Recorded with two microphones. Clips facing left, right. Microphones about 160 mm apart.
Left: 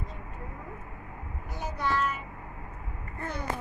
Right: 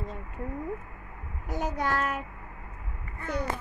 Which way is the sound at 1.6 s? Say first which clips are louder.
Right 1 dB; 45° right (ahead or behind).